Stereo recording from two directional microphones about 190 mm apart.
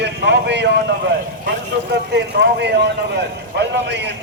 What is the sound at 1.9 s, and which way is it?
A man's voice, 60° right (ahead or behind).